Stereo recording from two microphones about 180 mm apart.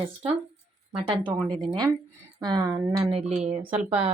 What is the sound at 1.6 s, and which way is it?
Speech, 25° right (ahead or behind).